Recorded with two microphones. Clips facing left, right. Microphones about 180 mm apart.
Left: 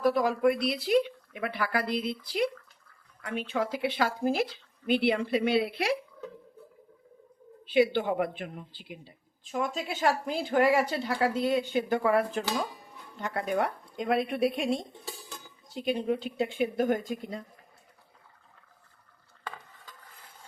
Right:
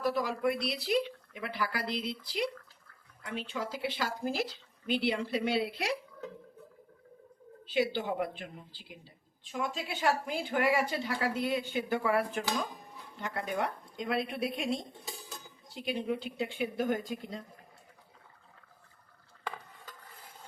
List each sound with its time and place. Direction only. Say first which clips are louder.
0.0 s speech: left 6 dB; 50° left (ahead or behind)
7.7 s speech: left 6 dB; 60° left (ahead or behind)